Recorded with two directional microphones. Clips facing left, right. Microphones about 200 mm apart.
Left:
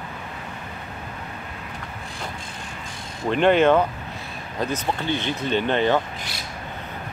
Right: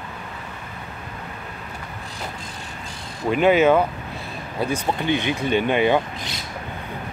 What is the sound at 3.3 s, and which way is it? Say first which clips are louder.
Speech: right 1 dB; 5° right (ahead or behind).